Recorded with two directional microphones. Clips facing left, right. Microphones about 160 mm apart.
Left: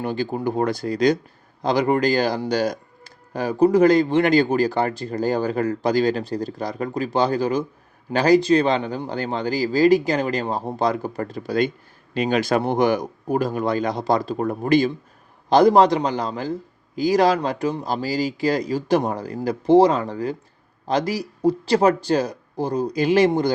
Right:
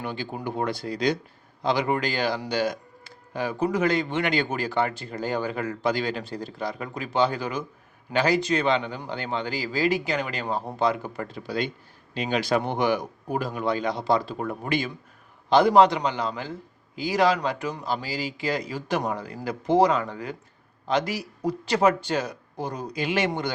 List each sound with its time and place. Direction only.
0.0 s a man's voice: 40° left (ahead or behind)